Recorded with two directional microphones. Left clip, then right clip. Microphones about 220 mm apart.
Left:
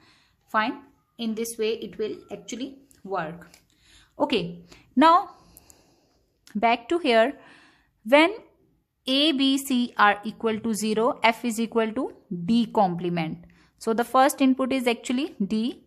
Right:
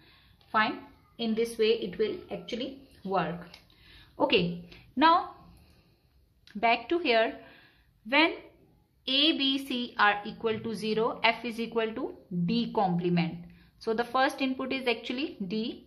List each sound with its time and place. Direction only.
0.0 s a woman's voice: 50° left (ahead or behind)
6.4 s a sound: 45° left (ahead or behind)
9.0 s a woman's voice: 45° left (ahead or behind)